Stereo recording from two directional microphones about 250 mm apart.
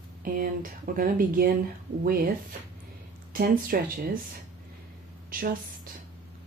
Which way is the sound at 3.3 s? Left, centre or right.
Right.